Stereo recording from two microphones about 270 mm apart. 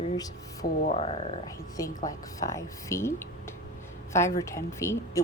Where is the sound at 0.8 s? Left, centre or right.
Left.